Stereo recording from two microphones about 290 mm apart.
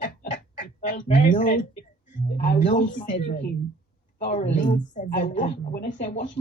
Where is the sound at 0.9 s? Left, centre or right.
Left.